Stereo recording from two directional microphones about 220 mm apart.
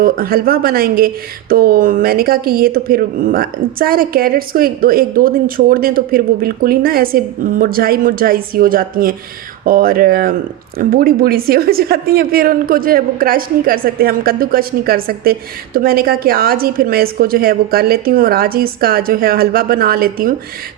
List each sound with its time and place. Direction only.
0.0 s a woman's voice: 40° right (ahead or behind)